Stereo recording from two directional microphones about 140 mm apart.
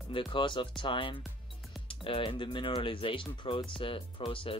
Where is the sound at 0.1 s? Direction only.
35° left (ahead or behind).